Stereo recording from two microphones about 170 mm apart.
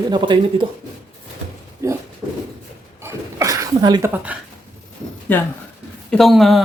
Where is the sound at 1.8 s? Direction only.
15° right (ahead or behind).